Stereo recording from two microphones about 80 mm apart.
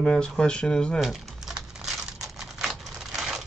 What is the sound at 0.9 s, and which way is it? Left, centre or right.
Crumpling, centre.